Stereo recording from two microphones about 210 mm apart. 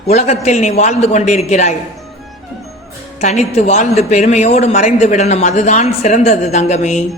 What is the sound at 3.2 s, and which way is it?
Speech, 30° left (ahead or behind).